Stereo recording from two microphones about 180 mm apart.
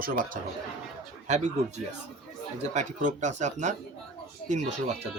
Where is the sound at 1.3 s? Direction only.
40° right (ahead or behind).